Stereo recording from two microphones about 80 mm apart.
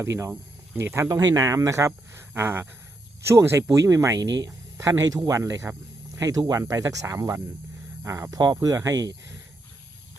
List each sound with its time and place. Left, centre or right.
0.0 s speech: right
8.4 s speech: right